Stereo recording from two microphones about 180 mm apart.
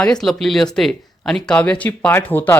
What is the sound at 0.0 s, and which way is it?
Speech, 5° left (ahead or behind).